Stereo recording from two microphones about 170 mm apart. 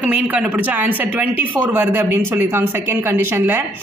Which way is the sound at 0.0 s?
5° right (ahead or behind).